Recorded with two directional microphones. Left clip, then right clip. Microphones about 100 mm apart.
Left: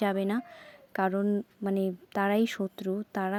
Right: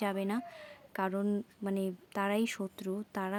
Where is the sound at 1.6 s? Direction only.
45° left (ahead or behind).